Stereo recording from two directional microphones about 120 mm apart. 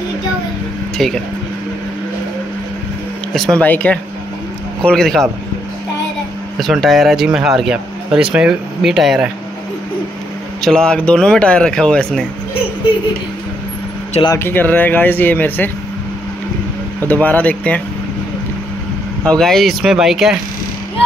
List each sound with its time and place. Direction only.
0.9 s speech: 5° left (ahead or behind)
3.5 s speech: 15° left (ahead or behind)
6.6 s speech: centre (ahead or behind)
10.6 s speech: 5° left (ahead or behind)
14.4 s speech: 15° left (ahead or behind)
17.1 s speech: 15° left (ahead or behind)
19.2 s speech: 5° left (ahead or behind)